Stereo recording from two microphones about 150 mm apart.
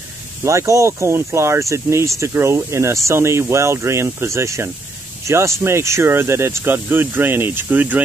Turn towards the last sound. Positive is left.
turn(degrees=-10)  # may be behind; listen again after turning